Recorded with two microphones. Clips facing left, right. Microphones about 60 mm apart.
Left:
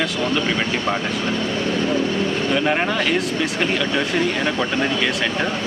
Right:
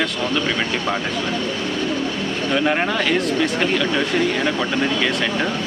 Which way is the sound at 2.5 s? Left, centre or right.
Centre.